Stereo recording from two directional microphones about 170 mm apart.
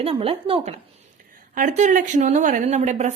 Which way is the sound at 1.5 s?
50° right (ahead or behind).